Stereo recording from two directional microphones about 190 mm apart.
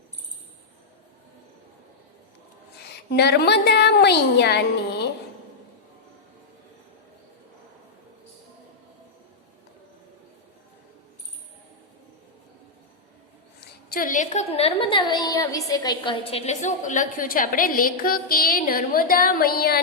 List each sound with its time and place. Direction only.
3.1 s a woman's voice: 60° left (ahead or behind)
13.6 s a woman's voice: 50° left (ahead or behind)